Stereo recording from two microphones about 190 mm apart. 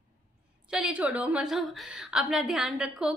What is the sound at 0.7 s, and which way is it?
A woman's voice, 5° right (ahead or behind).